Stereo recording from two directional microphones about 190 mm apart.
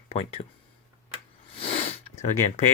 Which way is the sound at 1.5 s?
30° left (ahead or behind).